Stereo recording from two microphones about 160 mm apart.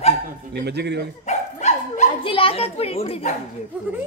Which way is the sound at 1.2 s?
45° left (ahead or behind).